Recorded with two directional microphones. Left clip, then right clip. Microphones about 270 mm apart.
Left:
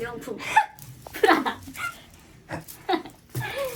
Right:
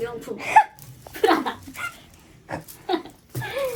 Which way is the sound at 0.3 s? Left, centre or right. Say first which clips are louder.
Right 5 dB; centre.